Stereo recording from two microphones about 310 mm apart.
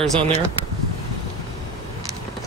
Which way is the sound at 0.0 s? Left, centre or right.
Centre.